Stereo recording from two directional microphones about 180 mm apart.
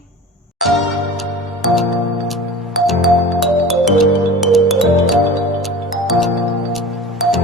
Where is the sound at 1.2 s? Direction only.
Centre (ahead or behind).